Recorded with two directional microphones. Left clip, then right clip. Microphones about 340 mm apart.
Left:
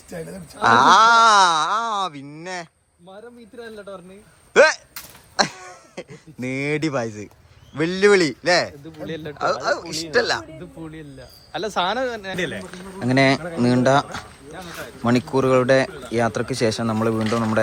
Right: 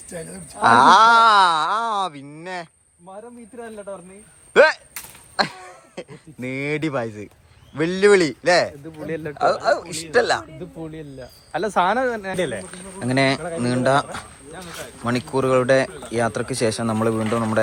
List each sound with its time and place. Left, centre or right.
0.6 s speech: centre
4.5 s a man's voice: centre
9.0 s speech: centre
9.6 s speech: centre
11.5 s speech: centre
12.7 s a man's voice: centre